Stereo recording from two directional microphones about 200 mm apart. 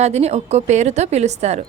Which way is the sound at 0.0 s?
35° right (ahead or behind).